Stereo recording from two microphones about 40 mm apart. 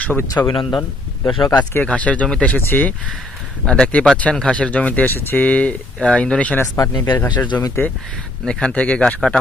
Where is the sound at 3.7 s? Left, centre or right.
Left.